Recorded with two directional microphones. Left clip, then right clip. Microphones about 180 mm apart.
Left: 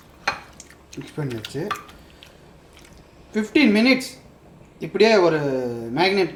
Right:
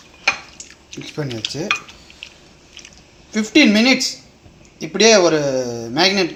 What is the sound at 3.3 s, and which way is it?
A man's voice, 25° right (ahead or behind).